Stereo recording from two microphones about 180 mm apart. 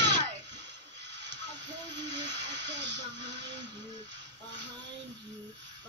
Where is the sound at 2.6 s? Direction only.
75° right (ahead or behind).